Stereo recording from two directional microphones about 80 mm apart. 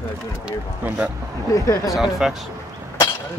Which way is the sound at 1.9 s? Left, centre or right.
Centre.